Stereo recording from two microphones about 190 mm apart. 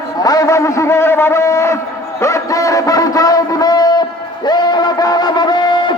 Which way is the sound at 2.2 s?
15° left (ahead or behind).